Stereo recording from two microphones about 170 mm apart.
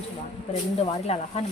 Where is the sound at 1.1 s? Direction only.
40° left (ahead or behind).